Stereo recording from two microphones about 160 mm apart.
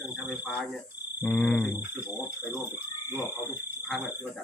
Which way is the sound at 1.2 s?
15° left (ahead or behind).